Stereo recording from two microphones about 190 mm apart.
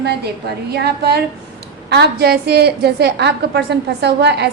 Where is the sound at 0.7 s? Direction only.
60° right (ahead or behind).